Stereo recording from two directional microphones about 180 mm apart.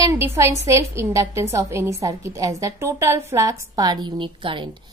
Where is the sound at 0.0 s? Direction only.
15° right (ahead or behind).